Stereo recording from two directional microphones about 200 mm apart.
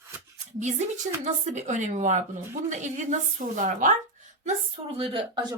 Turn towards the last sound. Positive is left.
turn(degrees=-25)  # may be behind; listen again after turning